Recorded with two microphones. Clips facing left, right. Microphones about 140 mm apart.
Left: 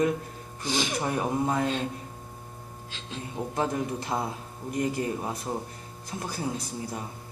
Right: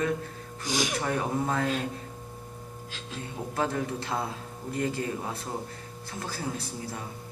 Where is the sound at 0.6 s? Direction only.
10° right (ahead or behind).